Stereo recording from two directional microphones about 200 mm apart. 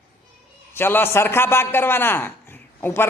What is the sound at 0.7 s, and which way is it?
A man's voice, 10° left (ahead or behind).